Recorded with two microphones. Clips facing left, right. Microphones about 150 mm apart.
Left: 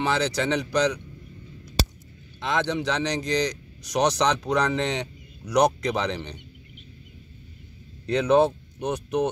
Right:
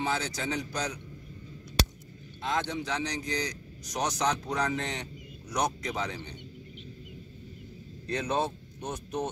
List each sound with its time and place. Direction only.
0.0 s a man's voice: 75° left (ahead or behind)
2.4 s a man's voice: 90° left; by 6.3 s 75° left (ahead or behind)
8.1 s speech: 65° left (ahead or behind)